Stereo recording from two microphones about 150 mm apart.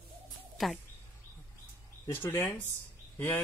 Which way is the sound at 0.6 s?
Centre (ahead or behind).